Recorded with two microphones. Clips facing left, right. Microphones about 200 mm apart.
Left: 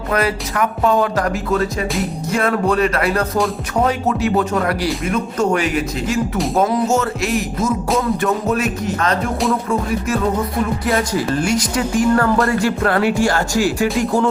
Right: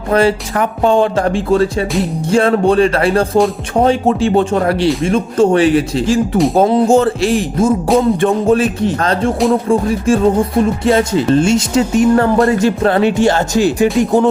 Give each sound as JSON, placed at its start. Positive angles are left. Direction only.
{"t": 0.1, "sound": "speech", "side_deg": -30}
{"t": 5.0, "sound": "music", "side_deg": -30}
{"t": 6.3, "sound": "speech", "side_deg": 0}
{"t": 6.6, "sound": "music", "side_deg": -30}
{"t": 7.9, "sound": "speech", "side_deg": -30}